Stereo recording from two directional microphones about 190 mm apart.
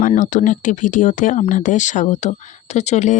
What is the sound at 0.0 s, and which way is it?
Speech, 40° left (ahead or behind).